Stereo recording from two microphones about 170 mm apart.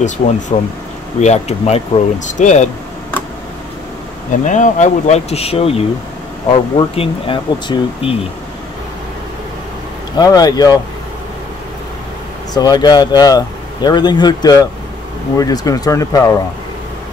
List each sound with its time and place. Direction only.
0.5 s speech: 35° left (ahead or behind)
4.5 s speech: 45° left (ahead or behind); by 8.2 s 30° left (ahead or behind)
10.1 s speech: 20° left (ahead or behind)
12.5 s speech: 25° left (ahead or behind)